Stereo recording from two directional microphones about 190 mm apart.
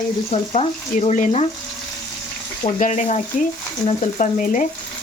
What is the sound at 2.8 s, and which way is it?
Speech, 40° left (ahead or behind).